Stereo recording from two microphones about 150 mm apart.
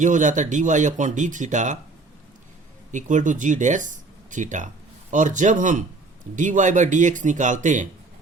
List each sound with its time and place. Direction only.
0.0 s speech: 55° right (ahead or behind)
2.9 s speech: 55° right (ahead or behind)